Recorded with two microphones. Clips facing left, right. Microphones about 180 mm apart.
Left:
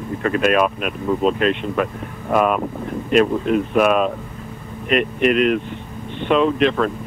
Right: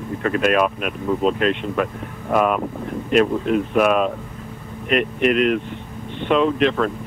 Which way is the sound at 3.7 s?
15° left (ahead or behind).